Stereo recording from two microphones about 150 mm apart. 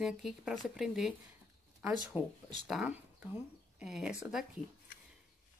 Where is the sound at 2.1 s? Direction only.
10° right (ahead or behind).